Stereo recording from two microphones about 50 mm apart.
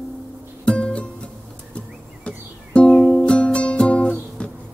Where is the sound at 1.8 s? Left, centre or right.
Left.